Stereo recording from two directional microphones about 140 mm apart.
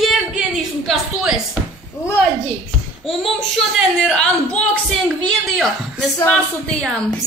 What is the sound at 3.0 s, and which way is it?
A woman's voice, centre (ahead or behind).